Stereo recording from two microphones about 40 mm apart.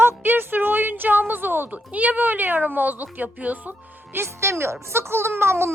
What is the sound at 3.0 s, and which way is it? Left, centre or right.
Speech, right.